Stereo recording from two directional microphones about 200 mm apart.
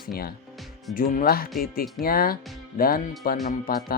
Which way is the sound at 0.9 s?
45° left (ahead or behind).